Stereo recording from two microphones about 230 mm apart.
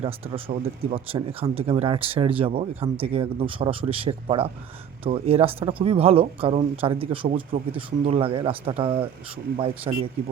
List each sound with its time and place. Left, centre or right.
0.0 s speech: right